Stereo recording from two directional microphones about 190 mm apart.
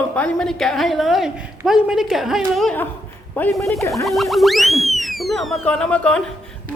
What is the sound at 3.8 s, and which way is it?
Speech, 15° left (ahead or behind).